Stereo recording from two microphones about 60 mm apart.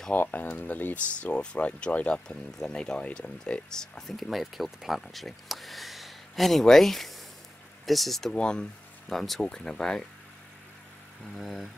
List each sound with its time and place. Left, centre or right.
0.1 s speech: left; by 4.0 s centre
4.2 s speech: centre
11.3 s speech: centre